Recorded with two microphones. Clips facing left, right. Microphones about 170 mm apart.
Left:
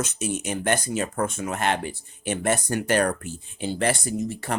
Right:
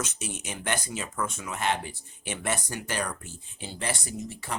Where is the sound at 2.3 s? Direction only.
45° left (ahead or behind).